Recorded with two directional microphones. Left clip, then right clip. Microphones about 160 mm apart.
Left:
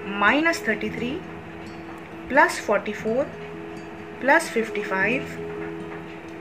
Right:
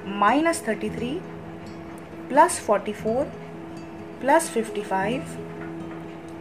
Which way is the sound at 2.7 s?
25° right (ahead or behind).